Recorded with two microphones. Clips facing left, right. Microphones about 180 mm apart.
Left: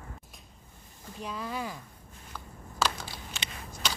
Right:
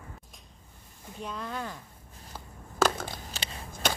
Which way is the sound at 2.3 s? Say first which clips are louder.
Even; 50° right (ahead or behind).